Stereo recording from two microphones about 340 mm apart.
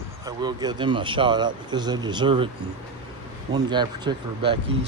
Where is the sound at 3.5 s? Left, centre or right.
Centre.